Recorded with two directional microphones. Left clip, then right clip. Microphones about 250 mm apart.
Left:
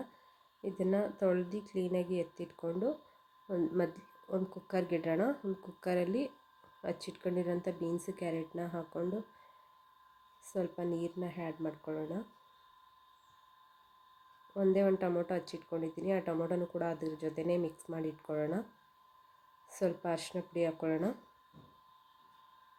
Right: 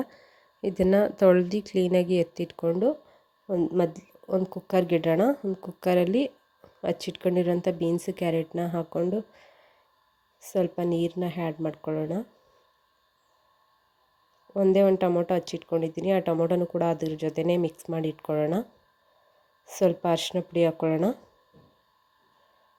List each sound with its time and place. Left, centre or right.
0.6 s a woman's voice: right
10.4 s a woman's voice: right
14.5 s a woman's voice: right
19.6 s a woman's voice: right